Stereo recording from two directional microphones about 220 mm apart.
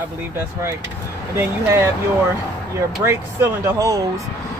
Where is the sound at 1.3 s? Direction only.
10° right (ahead or behind).